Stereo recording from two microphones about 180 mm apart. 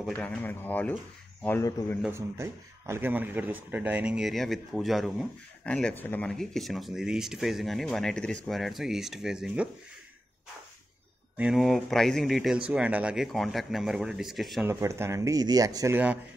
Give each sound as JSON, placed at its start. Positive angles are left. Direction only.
{"t": 0.0, "sound": "speech", "side_deg": 5}
{"t": 2.0, "sound": "speech", "side_deg": -15}
{"t": 11.3, "sound": "speech", "side_deg": -5}
{"t": 14.7, "sound": "speech", "side_deg": -15}